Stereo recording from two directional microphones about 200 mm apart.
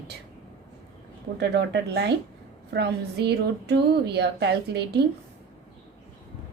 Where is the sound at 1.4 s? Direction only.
60° right (ahead or behind).